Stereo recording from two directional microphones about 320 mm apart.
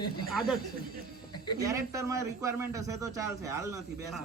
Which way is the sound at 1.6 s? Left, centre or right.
Centre.